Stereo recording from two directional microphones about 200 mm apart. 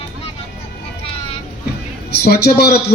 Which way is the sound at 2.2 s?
55° left (ahead or behind).